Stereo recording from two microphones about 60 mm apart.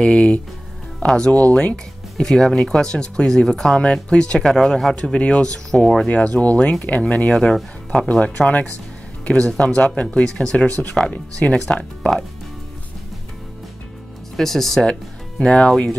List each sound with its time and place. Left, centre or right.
0.0 s speech: centre
1.3 s speech: left
5.7 s speech: centre
6.0 s speech: centre
7.2 s speech: centre
8.1 s speech: left
10.3 s speech: centre
14.3 s speech: centre
14.9 s speech: centre